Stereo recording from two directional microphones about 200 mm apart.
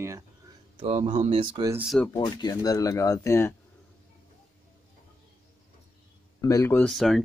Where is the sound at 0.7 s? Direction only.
30° right (ahead or behind).